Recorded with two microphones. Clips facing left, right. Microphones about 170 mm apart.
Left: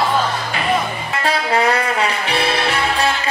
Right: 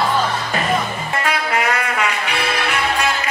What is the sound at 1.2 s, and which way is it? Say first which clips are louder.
Music: left 4 dB; 30° left (ahead or behind).